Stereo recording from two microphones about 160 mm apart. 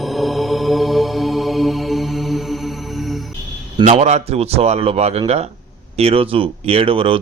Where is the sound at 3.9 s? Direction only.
40° right (ahead or behind).